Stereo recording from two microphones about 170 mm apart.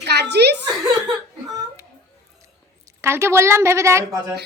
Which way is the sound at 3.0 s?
15° right (ahead or behind).